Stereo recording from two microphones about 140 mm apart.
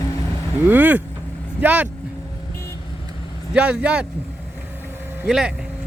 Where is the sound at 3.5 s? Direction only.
5° right (ahead or behind).